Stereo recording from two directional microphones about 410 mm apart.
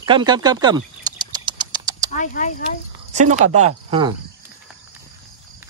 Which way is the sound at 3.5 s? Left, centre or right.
Centre.